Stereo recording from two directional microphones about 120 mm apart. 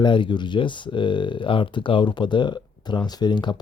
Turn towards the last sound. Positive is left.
turn(degrees=40)  # may be behind; listen again after turning